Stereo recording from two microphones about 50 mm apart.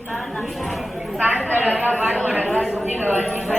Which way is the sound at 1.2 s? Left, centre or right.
Right.